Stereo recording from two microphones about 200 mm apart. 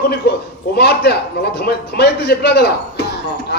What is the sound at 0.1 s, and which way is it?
Speech, 55° left (ahead or behind).